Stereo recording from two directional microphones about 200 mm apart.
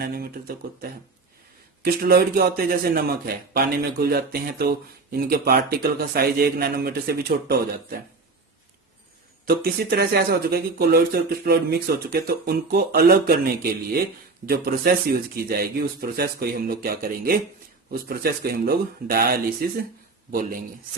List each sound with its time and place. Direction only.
0.0 s speech: 50° right (ahead or behind)
9.6 s speech: 50° right (ahead or behind)